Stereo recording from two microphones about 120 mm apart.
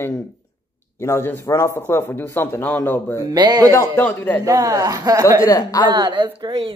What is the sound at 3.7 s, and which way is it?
Speech, 20° left (ahead or behind).